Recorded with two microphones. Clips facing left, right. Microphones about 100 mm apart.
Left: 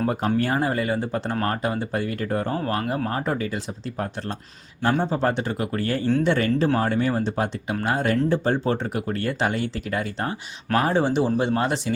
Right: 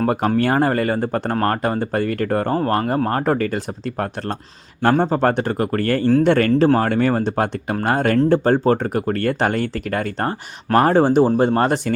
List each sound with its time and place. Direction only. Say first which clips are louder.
0.0 s speech: right 5 dB; 60° right (ahead or behind)
2.6 s speech: right 6 dB; 50° right (ahead or behind)
6.7 s speech: right 5 dB; 70° right (ahead or behind); by 11.9 s 55° right (ahead or behind)